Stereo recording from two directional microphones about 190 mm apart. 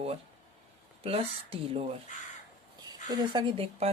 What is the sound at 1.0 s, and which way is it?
A woman's voice, 30° right (ahead or behind).